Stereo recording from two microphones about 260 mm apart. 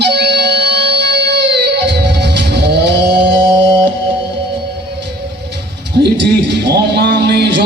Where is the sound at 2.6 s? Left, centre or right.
Right.